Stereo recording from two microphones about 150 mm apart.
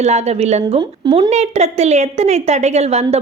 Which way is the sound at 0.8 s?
35° right (ahead or behind).